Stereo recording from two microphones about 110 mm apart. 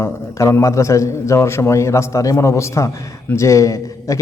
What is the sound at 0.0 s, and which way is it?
A man's voice, 25° left (ahead or behind).